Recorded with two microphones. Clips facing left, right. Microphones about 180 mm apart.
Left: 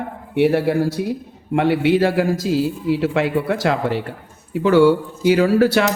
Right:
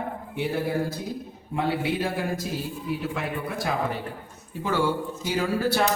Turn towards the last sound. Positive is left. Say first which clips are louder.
# left 8 dB
turn(degrees=85)